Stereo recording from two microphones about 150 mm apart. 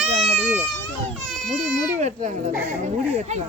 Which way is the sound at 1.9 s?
50° right (ahead or behind).